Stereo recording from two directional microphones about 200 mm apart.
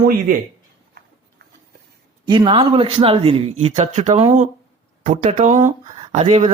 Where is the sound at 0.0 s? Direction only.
45° right (ahead or behind).